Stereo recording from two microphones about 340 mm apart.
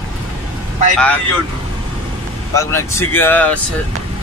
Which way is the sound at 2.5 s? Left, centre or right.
Centre.